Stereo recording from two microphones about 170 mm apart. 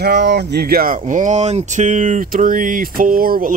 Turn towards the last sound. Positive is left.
turn(degrees=-55)  # may be behind; listen again after turning